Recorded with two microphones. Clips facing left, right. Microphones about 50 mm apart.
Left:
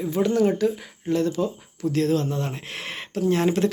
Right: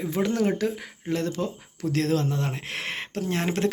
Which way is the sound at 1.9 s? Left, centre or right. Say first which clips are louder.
Left 2 dB; right.